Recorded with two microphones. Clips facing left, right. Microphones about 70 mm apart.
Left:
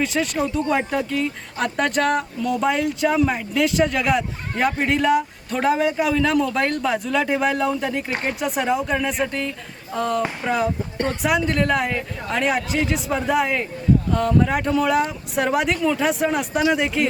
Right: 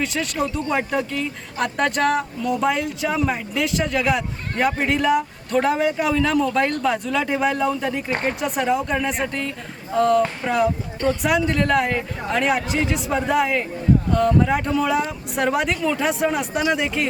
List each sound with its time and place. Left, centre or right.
0.0 s speech: centre